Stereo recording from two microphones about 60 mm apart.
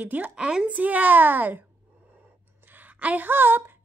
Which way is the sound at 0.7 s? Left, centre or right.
Right.